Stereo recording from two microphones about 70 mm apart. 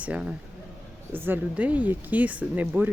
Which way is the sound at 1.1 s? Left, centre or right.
Right.